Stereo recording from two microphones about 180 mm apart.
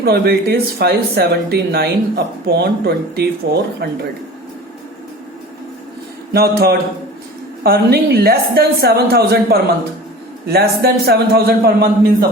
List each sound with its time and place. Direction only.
0.0 s speech: 60° right (ahead or behind)
6.3 s speech: 60° right (ahead or behind)